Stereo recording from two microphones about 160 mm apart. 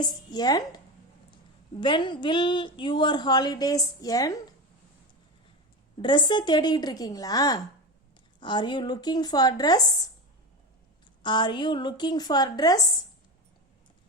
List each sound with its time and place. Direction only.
0.0 s a woman's voice: 25° left (ahead or behind)
1.8 s a woman's voice: 30° left (ahead or behind)
6.0 s a woman's voice: 30° left (ahead or behind)
11.2 s a woman's voice: 30° left (ahead or behind)